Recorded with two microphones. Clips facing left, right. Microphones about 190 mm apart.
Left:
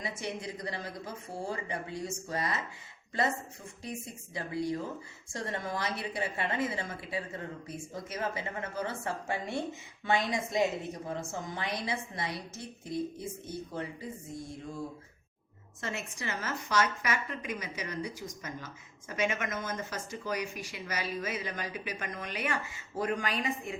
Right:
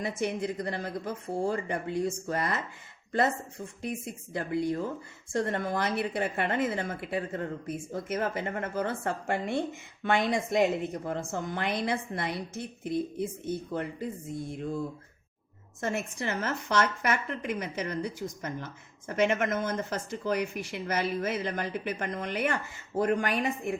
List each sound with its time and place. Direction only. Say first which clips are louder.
0.0 s a woman's voice: right 7 dB; 50° right (ahead or behind)
15.8 s a woman's voice: right 6 dB; 50° right (ahead or behind)